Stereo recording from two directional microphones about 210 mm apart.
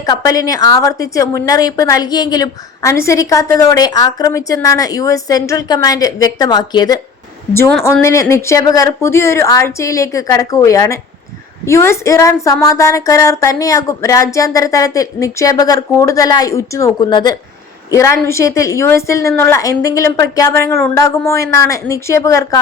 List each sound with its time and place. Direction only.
0.0 s a woman's voice: 15° left (ahead or behind)